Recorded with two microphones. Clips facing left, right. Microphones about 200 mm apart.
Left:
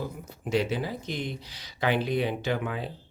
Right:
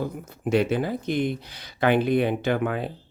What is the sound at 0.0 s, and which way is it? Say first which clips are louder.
Speech: right 6 dB; 55° right (ahead or behind).